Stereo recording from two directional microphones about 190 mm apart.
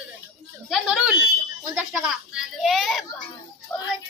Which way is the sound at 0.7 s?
Centre (ahead or behind).